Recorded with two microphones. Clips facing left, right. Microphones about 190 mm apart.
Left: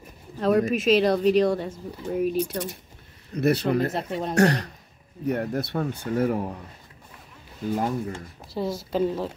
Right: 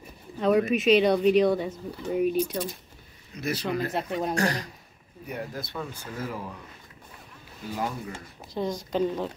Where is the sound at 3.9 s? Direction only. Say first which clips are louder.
Even; centre (ahead or behind).